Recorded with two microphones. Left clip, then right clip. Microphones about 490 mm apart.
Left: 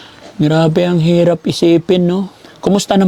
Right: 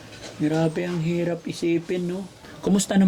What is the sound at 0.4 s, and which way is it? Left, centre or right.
Speech, left.